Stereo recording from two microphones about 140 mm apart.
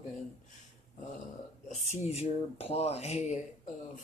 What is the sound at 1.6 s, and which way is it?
Speech, 50° left (ahead or behind).